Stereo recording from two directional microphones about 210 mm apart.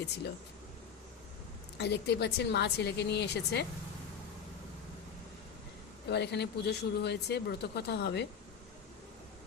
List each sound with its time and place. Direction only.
1.8 s speech: 50° left (ahead or behind)
6.1 s speech: 55° left (ahead or behind)